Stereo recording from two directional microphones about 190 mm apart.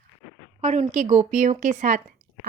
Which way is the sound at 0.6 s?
35° right (ahead or behind).